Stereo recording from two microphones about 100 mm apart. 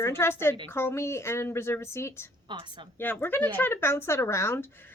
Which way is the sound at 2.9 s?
20° left (ahead or behind).